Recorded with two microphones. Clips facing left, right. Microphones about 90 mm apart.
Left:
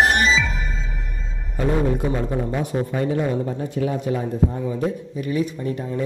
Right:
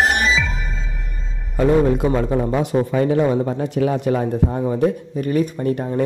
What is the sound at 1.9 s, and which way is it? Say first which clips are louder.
Speech: right 5 dB; 90° right.